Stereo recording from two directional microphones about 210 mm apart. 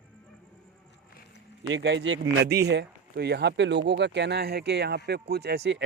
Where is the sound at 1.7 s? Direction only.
60° right (ahead or behind).